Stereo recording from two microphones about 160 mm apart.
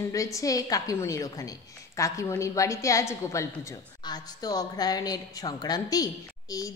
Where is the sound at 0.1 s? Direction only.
20° left (ahead or behind).